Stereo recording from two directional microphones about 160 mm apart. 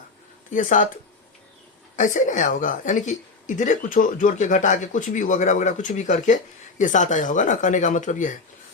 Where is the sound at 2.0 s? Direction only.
55° left (ahead or behind).